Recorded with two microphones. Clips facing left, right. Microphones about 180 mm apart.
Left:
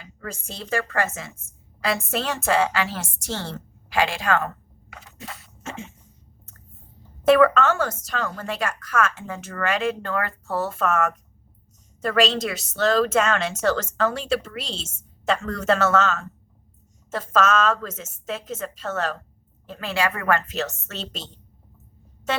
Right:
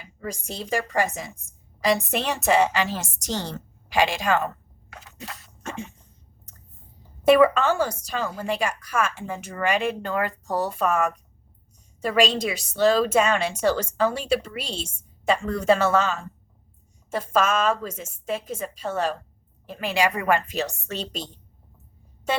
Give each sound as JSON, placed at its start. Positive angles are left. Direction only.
{"t": 0.0, "sound": "a woman's voice", "side_deg": -15}
{"t": 4.9, "sound": "a sound", "side_deg": 0}
{"t": 7.3, "sound": "a woman's voice", "side_deg": -15}